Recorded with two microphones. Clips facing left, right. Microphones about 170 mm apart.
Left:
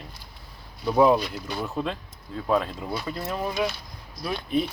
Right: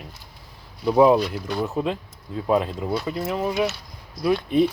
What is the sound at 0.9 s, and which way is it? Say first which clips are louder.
Speech: right 3 dB; 15° right (ahead or behind).